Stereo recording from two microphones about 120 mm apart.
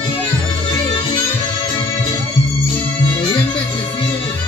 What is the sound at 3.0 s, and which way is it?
Music, 40° left (ahead or behind).